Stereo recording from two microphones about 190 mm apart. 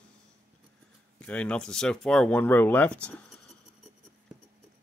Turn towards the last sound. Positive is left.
turn(degrees=5)  # may be behind; listen again after turning